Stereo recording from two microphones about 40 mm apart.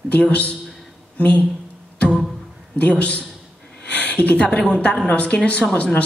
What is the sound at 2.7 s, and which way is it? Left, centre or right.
Speech, left.